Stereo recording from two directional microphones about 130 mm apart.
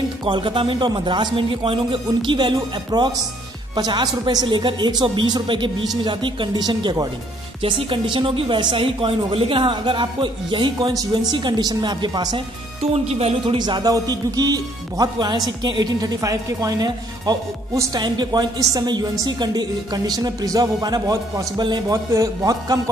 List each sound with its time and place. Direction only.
0.2 s speech: 40° right (ahead or behind)
12.9 s speech: 50° right (ahead or behind)
13.6 s speech: 35° right (ahead or behind)